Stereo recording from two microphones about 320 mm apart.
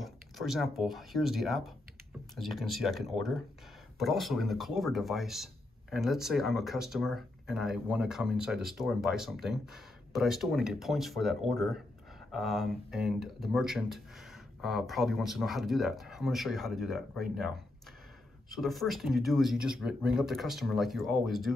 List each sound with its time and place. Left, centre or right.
0.0 s speech: centre